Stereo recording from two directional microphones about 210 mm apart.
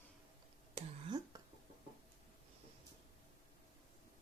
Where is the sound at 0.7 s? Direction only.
20° right (ahead or behind).